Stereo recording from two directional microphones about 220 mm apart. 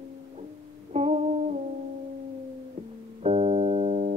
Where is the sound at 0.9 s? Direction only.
30° right (ahead or behind).